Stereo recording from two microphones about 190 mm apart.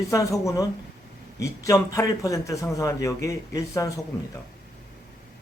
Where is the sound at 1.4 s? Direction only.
15° left (ahead or behind).